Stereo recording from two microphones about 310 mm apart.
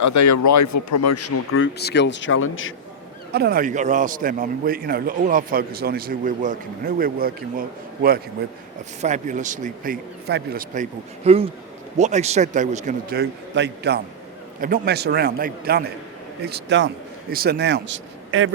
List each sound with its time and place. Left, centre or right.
0.0 s speech: left
3.3 s a man's voice: right
9.0 s a man's voice: right